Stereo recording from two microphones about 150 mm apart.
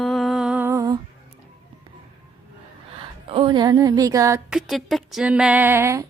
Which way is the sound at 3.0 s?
35° right (ahead or behind).